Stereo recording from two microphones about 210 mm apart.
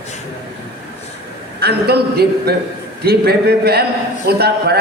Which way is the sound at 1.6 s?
50° right (ahead or behind).